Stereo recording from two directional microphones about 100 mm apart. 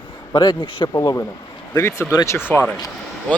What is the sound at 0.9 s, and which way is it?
A man's voice, 30° left (ahead or behind).